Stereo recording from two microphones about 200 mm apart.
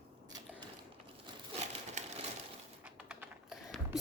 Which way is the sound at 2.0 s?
35° right (ahead or behind).